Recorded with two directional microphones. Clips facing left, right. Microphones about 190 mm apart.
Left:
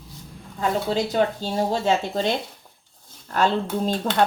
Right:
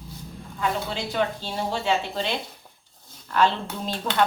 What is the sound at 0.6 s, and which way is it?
Speech, 40° left (ahead or behind).